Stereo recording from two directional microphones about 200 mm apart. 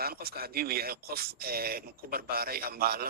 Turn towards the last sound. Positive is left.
turn(degrees=-50)  # may be behind; listen again after turning